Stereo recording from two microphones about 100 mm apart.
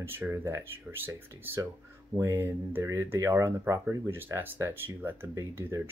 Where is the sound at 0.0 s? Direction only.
20° right (ahead or behind).